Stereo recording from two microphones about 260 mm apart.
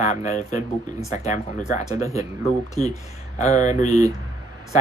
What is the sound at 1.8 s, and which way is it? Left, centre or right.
Speech, centre.